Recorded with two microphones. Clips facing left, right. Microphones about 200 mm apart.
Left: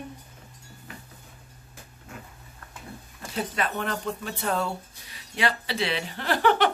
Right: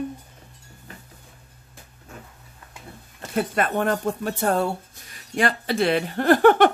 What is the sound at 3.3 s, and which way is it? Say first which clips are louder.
A woman's voice: right 6 dB; 50° right (ahead or behind).